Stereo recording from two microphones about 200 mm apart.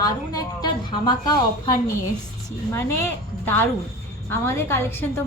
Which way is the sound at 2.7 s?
10° left (ahead or behind).